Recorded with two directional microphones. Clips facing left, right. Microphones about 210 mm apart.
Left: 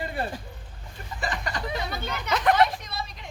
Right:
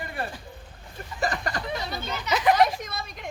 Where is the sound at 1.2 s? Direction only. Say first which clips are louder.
Right 3 dB; 40° right (ahead or behind).